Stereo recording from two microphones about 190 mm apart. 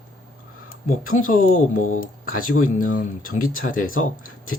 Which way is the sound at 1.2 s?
45° left (ahead or behind).